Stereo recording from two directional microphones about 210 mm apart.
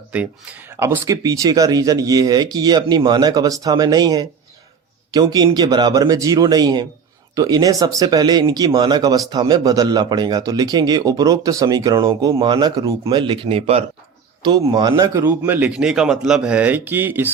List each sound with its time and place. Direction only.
0.1 s speech: 5° right (ahead or behind)